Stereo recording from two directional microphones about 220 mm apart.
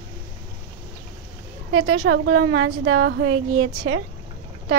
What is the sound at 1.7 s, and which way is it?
A woman's voice, 65° right (ahead or behind).